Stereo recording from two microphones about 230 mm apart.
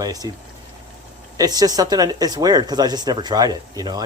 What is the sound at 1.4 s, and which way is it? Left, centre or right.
Speech, centre.